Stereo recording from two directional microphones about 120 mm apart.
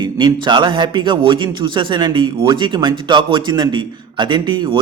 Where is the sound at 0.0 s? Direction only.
40° right (ahead or behind).